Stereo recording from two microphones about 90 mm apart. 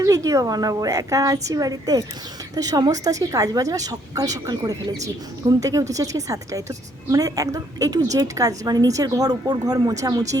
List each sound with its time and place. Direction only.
0.0 s a woman's voice: 35° right (ahead or behind)